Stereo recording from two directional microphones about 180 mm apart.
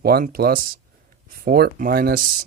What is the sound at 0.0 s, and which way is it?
Speech, 55° right (ahead or behind).